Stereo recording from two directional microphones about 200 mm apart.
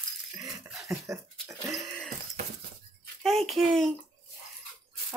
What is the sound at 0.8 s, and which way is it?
Speech, 15° right (ahead or behind).